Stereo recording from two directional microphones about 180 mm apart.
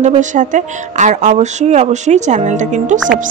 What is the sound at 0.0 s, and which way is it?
A woman's voice, 45° right (ahead or behind).